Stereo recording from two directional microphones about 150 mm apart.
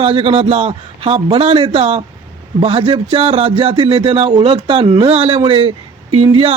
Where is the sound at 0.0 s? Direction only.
40° right (ahead or behind).